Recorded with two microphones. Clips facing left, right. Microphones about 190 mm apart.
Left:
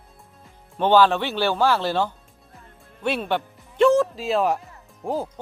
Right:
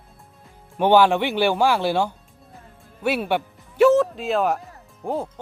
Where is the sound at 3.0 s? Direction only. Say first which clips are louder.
Right 2 dB; 10° right (ahead or behind).